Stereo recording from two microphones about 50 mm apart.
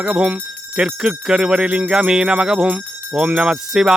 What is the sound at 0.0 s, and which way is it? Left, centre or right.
Speech, centre.